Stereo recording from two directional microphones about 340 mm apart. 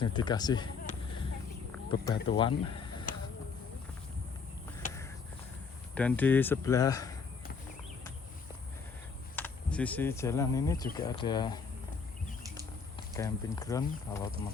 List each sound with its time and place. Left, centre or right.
0.0 s a sound: centre
1.9 s speech: centre
5.9 s speech: centre
9.3 s speech: centre
13.1 s speech: centre